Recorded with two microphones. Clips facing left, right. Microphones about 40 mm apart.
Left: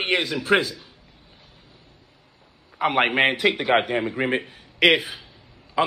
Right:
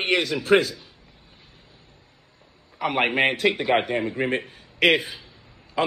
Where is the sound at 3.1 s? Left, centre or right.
Left.